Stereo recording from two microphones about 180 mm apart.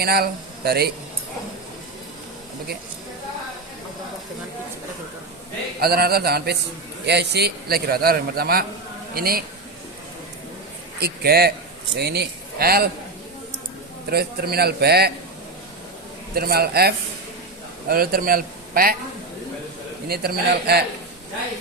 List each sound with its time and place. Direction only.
0.0 s a man's voice: 60° right (ahead or behind)
5.8 s a man's voice: 60° right (ahead or behind)
11.0 s a man's voice: 60° right (ahead or behind)
14.1 s a man's voice: 60° right (ahead or behind)
16.3 s a man's voice: 60° right (ahead or behind)
20.1 s a man's voice: 60° right (ahead or behind)